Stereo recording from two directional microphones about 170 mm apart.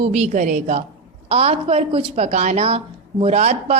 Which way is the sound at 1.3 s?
35° right (ahead or behind).